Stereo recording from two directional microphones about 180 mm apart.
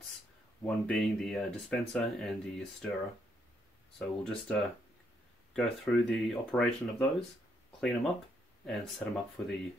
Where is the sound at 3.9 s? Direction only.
5° left (ahead or behind).